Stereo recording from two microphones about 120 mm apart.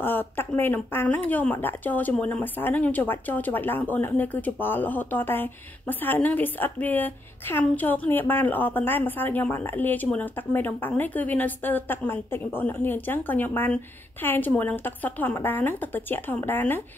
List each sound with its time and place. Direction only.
0.0 s speech: 15° left (ahead or behind)